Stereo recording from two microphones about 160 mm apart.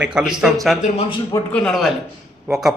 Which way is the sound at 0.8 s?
40° left (ahead or behind).